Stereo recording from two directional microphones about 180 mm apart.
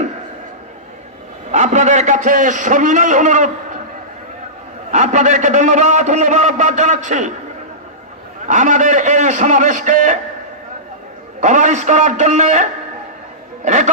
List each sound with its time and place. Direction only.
1.5 s a man's voice: 40° right (ahead or behind)
4.9 s a man's voice: 40° right (ahead or behind)
8.5 s a man's voice: 45° right (ahead or behind)
11.4 s a man's voice: 40° right (ahead or behind)